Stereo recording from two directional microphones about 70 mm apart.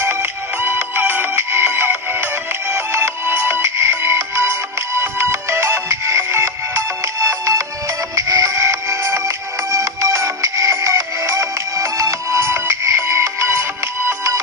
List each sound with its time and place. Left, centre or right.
0.0 s music: right
4.9 s ringtone: right
7.2 s music: right